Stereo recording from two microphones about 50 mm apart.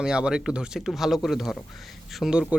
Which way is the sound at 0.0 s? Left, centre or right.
Centre.